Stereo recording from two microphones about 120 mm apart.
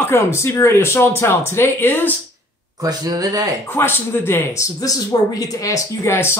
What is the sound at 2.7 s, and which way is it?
Speech, 35° right (ahead or behind).